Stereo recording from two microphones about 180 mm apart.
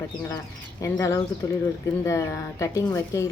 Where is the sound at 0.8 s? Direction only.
15° left (ahead or behind).